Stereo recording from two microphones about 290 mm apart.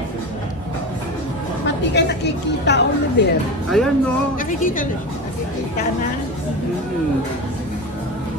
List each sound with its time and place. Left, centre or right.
2.0 s a woman's voice: left
3.7 s speech: centre
4.4 s a woman's voice: left